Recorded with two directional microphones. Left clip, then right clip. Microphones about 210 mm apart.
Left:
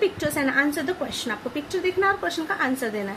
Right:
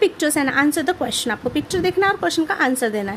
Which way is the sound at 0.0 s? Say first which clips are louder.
Right 5 dB; 55° right (ahead or behind).